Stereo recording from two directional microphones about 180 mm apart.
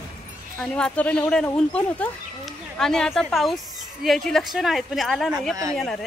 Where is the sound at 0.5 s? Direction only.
5° left (ahead or behind).